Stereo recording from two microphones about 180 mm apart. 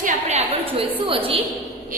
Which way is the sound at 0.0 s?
35° right (ahead or behind).